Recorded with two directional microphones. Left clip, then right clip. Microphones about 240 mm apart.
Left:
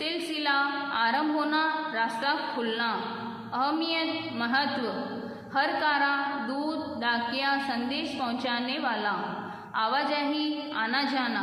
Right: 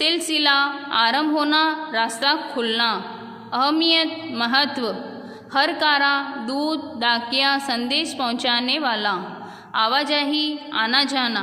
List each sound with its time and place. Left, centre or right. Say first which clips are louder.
0.0 s a woman's voice: right 10 dB; right